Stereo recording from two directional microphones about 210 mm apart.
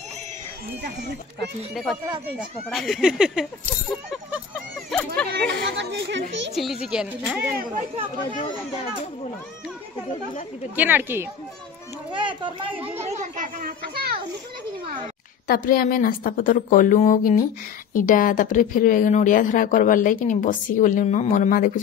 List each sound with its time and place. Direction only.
2.3 s speech: centre (ahead or behind)
5.3 s speech: 55° right (ahead or behind)
6.5 s speech: centre (ahead or behind)
10.8 s speech: 10° right (ahead or behind)
12.1 s a child's voice: 20° right (ahead or behind); by 14.2 s 45° right (ahead or behind)
15.4 s a woman's voice: 45° left (ahead or behind)